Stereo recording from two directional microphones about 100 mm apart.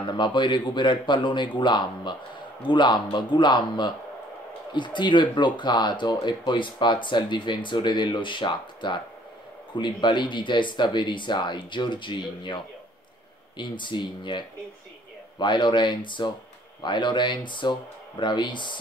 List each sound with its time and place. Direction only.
0.0 s speech: 50° left (ahead or behind)